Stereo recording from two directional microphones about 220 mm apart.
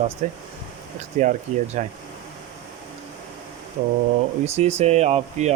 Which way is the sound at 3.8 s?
40° right (ahead or behind).